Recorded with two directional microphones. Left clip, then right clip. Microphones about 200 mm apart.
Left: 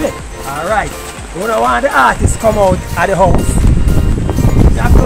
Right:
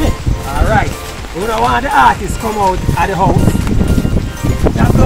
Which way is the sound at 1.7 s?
25° left (ahead or behind).